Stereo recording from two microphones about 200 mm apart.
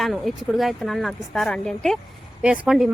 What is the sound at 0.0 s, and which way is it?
A woman's voice, centre (ahead or behind).